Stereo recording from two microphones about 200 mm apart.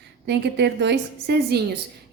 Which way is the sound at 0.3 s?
55° right (ahead or behind).